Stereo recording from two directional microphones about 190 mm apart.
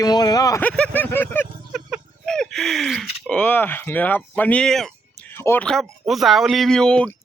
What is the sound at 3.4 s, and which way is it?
Speech, 10° left (ahead or behind).